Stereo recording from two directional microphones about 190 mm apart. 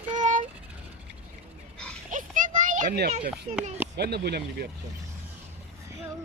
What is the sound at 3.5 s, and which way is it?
Speech, 35° right (ahead or behind).